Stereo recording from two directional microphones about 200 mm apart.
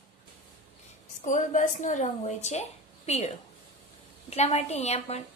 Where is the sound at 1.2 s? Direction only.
40° left (ahead or behind).